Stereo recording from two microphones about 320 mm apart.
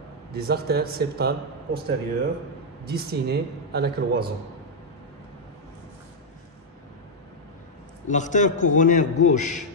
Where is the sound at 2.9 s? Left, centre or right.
Right.